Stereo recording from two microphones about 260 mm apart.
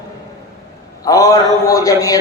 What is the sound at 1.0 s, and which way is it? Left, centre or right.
A man's voice, centre.